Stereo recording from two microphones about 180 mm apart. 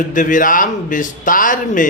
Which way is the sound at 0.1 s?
45° left (ahead or behind).